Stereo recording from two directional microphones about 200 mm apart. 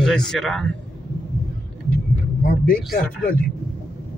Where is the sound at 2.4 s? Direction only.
45° left (ahead or behind).